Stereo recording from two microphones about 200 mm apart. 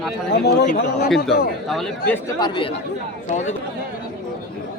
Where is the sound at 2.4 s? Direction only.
25° left (ahead or behind).